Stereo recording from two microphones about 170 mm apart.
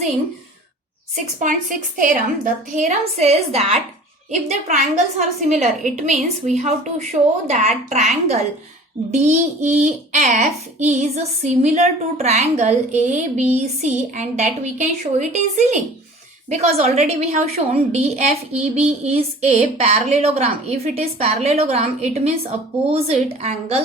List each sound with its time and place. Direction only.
1.1 s a woman's voice: 50° right (ahead or behind)
23.4 s a woman's voice: 35° right (ahead or behind)